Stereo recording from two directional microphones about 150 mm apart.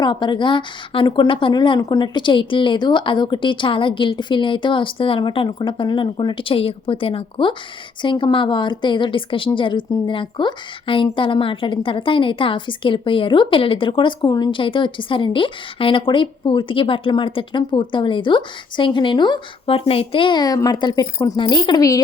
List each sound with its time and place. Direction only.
0.0 s a woman's voice: 30° left (ahead or behind)